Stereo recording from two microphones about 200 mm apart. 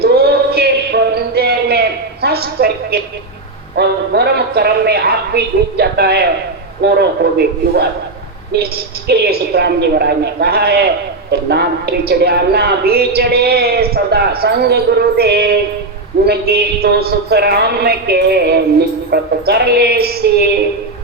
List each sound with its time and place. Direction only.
0.0 s music: 55° right (ahead or behind)
3.8 s a man's voice: 55° right (ahead or behind)